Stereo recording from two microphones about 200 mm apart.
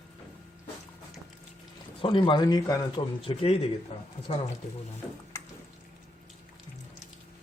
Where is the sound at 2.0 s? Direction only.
25° left (ahead or behind).